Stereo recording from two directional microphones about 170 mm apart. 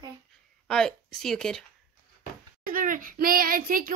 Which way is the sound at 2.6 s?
55° right (ahead or behind).